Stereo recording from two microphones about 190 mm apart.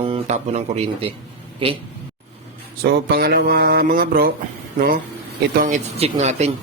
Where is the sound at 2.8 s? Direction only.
55° right (ahead or behind).